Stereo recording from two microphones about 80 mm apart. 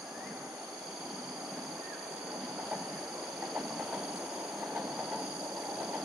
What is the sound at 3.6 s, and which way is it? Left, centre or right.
Train, centre.